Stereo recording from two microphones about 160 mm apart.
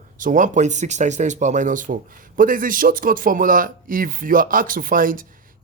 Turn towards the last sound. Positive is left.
turn(degrees=-60)  # may be behind; listen again after turning